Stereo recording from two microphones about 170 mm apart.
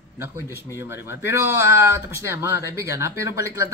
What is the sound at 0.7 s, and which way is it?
Speech, 15° right (ahead or behind).